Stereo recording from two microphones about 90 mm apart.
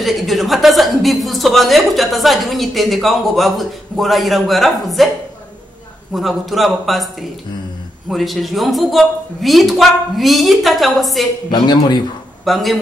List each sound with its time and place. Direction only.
0.0 s a woman's voice: centre (ahead or behind)
6.1 s a woman's voice: centre (ahead or behind)
11.5 s speech: 55° left (ahead or behind)
12.4 s a woman's voice: centre (ahead or behind)